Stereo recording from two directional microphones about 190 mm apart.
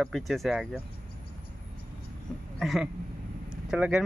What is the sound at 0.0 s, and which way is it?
Speech, centre (ahead or behind).